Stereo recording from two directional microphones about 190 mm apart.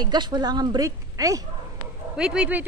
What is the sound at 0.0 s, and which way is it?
A woman's voice, 20° right (ahead or behind).